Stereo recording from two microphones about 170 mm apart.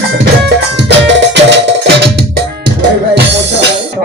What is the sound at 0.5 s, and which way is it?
Music, 90° right.